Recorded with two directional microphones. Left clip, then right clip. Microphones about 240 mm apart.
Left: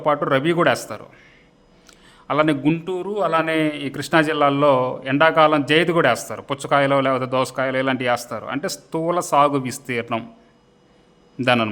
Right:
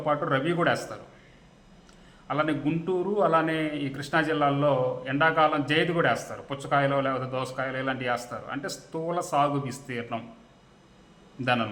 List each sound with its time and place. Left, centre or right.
0.0 s a man's voice: left
2.2 s a man's voice: left
11.3 s a man's voice: left